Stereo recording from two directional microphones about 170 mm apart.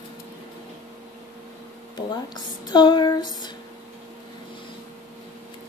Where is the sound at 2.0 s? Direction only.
25° left (ahead or behind).